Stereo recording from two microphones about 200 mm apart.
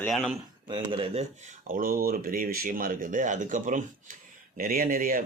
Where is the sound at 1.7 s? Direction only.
45° right (ahead or behind).